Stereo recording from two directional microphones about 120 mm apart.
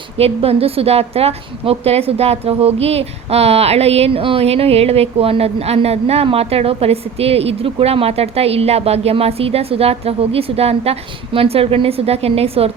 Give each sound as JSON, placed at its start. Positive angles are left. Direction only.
{"t": 0.2, "sound": "a woman's voice", "side_deg": -55}